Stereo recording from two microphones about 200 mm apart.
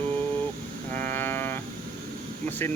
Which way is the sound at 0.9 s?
40° right (ahead or behind).